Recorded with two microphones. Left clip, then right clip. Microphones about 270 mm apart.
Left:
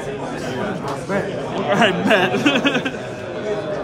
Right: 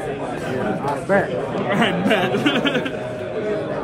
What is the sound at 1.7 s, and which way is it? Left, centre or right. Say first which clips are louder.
A man's voice: left 4 dB; left.